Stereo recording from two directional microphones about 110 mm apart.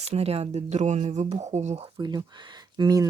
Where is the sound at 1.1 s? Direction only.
75° right (ahead or behind).